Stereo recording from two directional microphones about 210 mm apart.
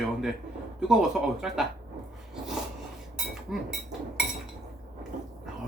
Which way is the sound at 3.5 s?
Centre (ahead or behind).